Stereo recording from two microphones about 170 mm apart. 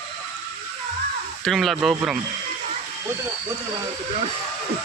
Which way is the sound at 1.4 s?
Centre (ahead or behind).